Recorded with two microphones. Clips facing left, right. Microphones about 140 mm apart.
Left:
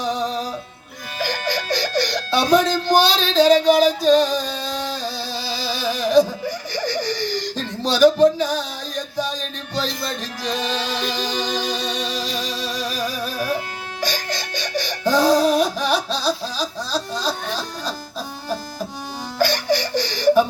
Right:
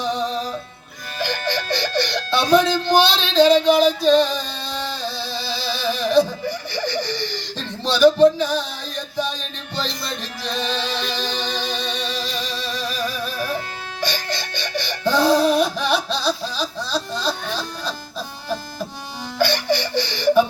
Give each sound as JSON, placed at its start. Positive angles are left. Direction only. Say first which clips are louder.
{"t": 0.1, "sound": "music", "louder": "even", "side_deg": 0}
{"t": 1.2, "sound": "music", "louder": "even", "side_deg": 40}
{"t": 1.7, "sound": "speech", "louder": "left 2 dB", "side_deg": 40}
{"t": 5.0, "sound": "a sound", "louder": "even", "side_deg": 40}
{"t": 7.9, "sound": "speech", "louder": "even", "side_deg": 45}
{"t": 8.4, "sound": "music", "louder": "even", "side_deg": 40}
{"t": 19.4, "sound": "baby laughter", "louder": "even", "side_deg": 40}
{"t": 19.7, "sound": "snicker", "louder": "left 1 dB", "side_deg": 40}